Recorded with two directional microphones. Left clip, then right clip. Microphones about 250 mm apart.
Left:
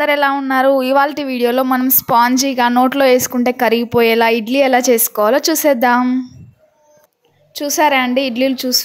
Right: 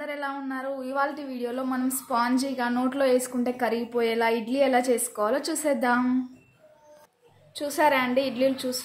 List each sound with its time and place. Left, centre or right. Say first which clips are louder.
0.0 s a woman's voice: left 18 dB; left
7.5 s a woman's voice: left 9 dB; left